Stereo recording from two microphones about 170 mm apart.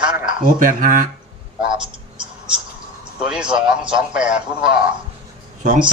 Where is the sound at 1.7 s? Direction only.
30° right (ahead or behind).